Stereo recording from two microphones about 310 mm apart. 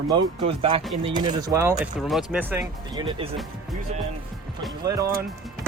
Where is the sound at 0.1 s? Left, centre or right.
Centre.